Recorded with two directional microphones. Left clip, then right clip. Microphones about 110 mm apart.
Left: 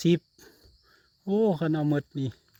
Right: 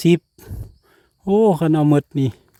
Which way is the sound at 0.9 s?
75° right (ahead or behind).